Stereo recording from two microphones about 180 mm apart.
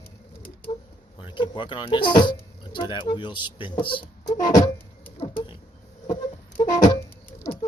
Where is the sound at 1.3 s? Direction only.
25° left (ahead or behind).